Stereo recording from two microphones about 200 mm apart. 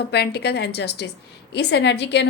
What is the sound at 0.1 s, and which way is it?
A woman's voice, 55° left (ahead or behind).